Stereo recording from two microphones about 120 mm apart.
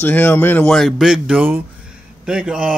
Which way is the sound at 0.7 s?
Centre (ahead or behind).